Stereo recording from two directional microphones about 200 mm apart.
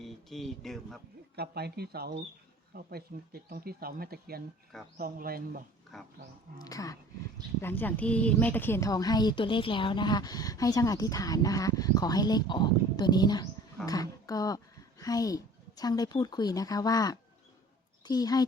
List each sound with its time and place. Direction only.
0.0 s speech: centre (ahead or behind)
1.4 s speech: 55° right (ahead or behind)
5.9 s speech: centre (ahead or behind)
6.7 s a woman's voice: 15° left (ahead or behind)